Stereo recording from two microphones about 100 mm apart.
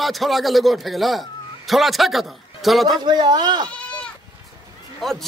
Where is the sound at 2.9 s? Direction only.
45° right (ahead or behind).